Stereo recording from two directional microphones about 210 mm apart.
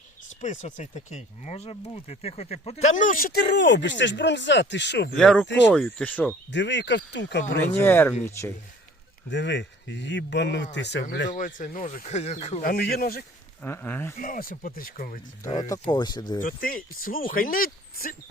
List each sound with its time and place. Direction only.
0.4 s speech: 35° left (ahead or behind); by 5.1 s 55° left (ahead or behind)
5.1 s speech: 5° left (ahead or behind)
6.5 s speech: 55° left (ahead or behind)
7.6 s speech: 10° left (ahead or behind)
9.3 s speech: 55° left (ahead or behind)
11.3 s speech: 40° left (ahead or behind)
12.7 s speech: 45° left (ahead or behind)
13.6 s speech: 10° left (ahead or behind)
14.2 s speech: 40° left (ahead or behind)
15.6 s speech: 20° left (ahead or behind)
16.4 s speech: 40° left (ahead or behind)